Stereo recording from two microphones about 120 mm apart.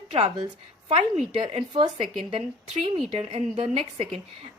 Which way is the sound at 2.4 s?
45° right (ahead or behind).